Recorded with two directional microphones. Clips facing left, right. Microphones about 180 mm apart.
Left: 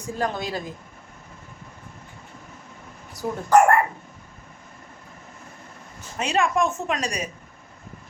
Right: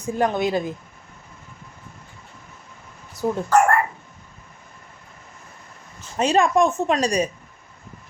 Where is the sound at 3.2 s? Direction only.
25° right (ahead or behind).